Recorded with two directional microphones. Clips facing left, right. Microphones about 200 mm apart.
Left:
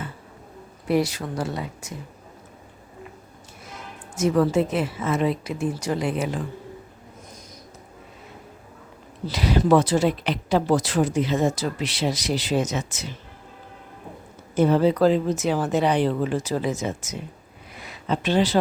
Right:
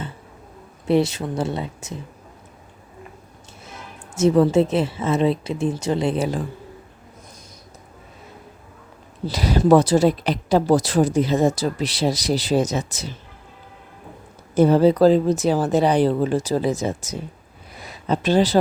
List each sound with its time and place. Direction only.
0.9 s a woman's voice: 25° right (ahead or behind)
4.2 s a woman's voice: 25° right (ahead or behind)
9.2 s speech: 40° right (ahead or behind)
14.5 s speech: 35° right (ahead or behind)